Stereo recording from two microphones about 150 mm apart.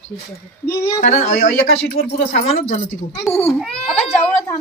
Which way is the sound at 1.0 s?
60° left (ahead or behind).